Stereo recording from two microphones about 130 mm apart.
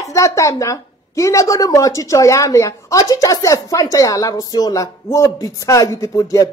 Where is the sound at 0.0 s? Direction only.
25° left (ahead or behind).